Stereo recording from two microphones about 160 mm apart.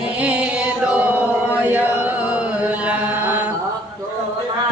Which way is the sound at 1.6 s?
10° right (ahead or behind).